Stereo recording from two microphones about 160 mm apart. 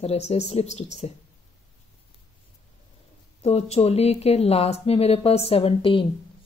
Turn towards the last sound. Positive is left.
turn(degrees=35)  # may be behind; listen again after turning